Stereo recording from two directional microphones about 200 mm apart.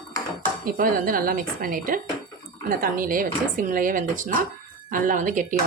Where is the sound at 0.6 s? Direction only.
45° right (ahead or behind).